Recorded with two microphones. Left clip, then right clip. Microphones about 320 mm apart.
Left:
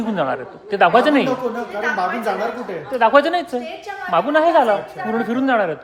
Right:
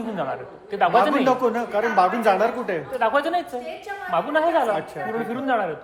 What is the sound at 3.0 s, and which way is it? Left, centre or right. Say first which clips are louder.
A man's voice: left 8 dB; left.